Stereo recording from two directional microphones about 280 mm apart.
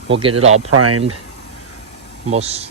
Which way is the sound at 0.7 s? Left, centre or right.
Right.